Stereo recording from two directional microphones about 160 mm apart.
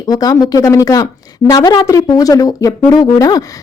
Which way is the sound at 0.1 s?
25° left (ahead or behind).